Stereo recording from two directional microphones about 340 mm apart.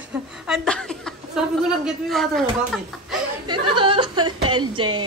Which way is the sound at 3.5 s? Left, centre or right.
Centre.